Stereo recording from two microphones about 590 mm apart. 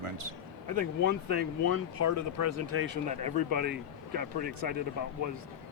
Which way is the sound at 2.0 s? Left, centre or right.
Right.